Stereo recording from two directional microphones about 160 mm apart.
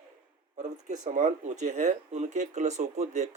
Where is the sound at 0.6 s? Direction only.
50° right (ahead or behind).